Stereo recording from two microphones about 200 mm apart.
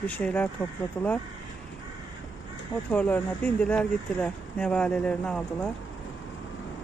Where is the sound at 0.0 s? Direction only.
5° left (ahead or behind).